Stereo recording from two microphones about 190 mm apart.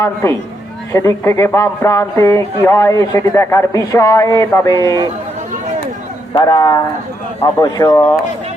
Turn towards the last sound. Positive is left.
turn(degrees=20)  # may be behind; listen again after turning